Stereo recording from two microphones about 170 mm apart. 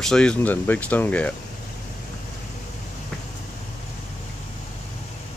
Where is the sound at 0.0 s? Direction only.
5° left (ahead or behind).